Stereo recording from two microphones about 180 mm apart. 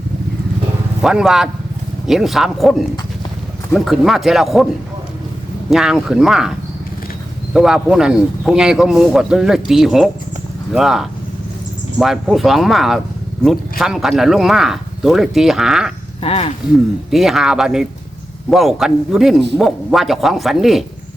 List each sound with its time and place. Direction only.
1.0 s a man's voice: centre (ahead or behind)
5.7 s a man's voice: centre (ahead or behind)
7.5 s a man's voice: 5° right (ahead or behind)
16.2 s speech: 35° left (ahead or behind)
17.1 s a man's voice: centre (ahead or behind)